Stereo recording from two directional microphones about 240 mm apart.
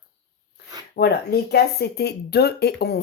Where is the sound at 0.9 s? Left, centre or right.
Left.